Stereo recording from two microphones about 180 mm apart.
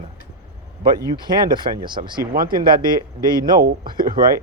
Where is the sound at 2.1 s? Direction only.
55° right (ahead or behind).